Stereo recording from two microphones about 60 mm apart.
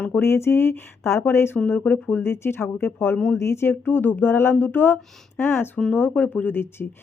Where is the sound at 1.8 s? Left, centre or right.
Left.